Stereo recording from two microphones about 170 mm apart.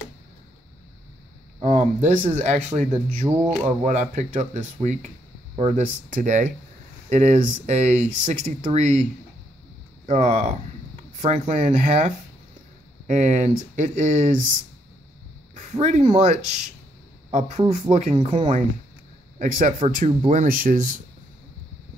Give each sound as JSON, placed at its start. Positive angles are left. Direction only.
{"t": 1.6, "sound": "speech", "side_deg": -40}
{"t": 10.0, "sound": "speech", "side_deg": -45}
{"t": 15.5, "sound": "speech", "side_deg": -40}